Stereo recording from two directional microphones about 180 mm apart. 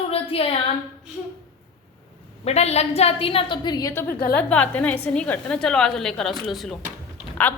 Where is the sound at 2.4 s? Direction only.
35° left (ahead or behind).